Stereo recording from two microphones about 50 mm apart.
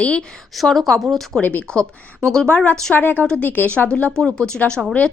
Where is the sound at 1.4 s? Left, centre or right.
Left.